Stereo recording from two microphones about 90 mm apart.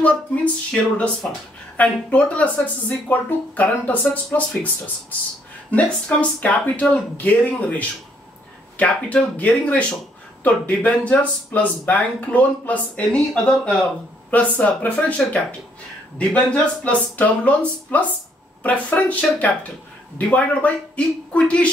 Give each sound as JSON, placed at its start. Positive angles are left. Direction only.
{"t": 0.0, "sound": "speech", "side_deg": 15}
{"t": 5.7, "sound": "speech", "side_deg": 15}
{"t": 14.3, "sound": "speech", "side_deg": 15}